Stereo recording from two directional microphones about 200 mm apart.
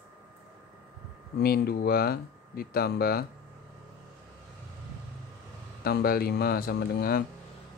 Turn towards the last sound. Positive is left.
turn(degrees=50)  # may be behind; listen again after turning